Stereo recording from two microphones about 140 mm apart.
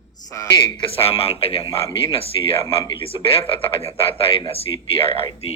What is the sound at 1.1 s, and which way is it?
Speech, 45° left (ahead or behind).